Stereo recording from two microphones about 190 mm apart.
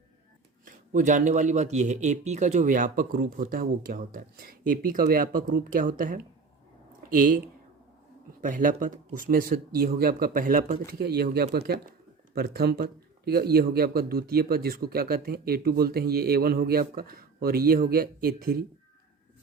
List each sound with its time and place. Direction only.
0.6 s speech: 40° right (ahead or behind)